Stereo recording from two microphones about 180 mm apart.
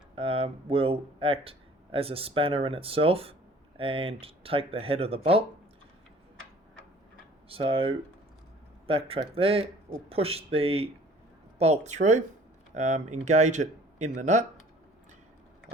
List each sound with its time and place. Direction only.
0.2 s speech: 30° right (ahead or behind)
7.4 s speech: 30° right (ahead or behind)